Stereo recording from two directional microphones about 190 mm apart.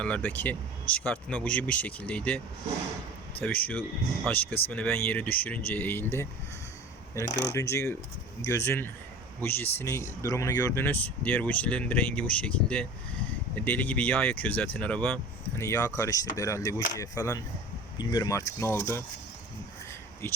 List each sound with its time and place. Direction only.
0.0 s speech: 5° left (ahead or behind)
3.4 s speech: 10° left (ahead or behind)
20.2 s speech: 10° left (ahead or behind)